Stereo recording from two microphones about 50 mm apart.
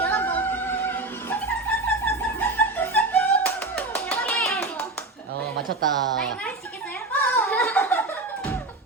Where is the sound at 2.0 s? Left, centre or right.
Left.